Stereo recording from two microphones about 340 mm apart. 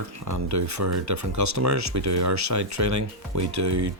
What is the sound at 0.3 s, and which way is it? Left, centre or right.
Speech, right.